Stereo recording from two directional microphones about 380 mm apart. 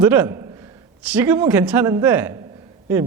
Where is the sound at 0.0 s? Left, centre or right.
Centre.